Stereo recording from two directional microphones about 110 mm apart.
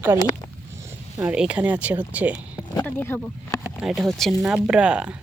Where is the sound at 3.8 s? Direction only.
Centre (ahead or behind).